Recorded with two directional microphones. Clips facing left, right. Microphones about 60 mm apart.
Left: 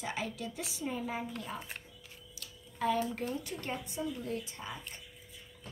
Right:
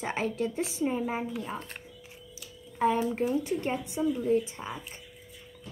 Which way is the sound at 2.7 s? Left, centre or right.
Right.